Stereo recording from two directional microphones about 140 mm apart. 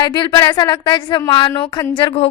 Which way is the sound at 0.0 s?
35° left (ahead or behind).